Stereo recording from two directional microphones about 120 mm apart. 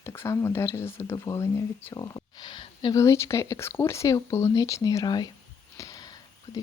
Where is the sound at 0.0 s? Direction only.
25° left (ahead or behind); by 2.9 s 40° left (ahead or behind).